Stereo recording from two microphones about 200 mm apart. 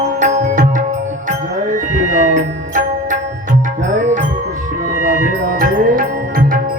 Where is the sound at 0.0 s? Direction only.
35° right (ahead or behind).